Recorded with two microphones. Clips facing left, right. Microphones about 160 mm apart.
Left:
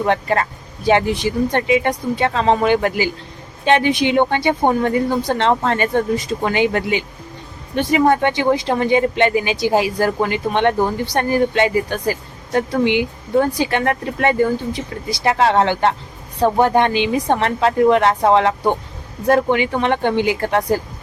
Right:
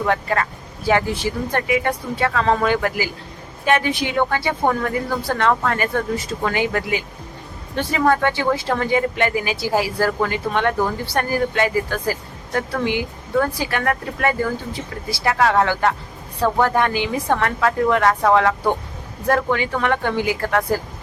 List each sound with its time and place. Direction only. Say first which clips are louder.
0.0 s speech: left 3 dB; 25° left (ahead or behind)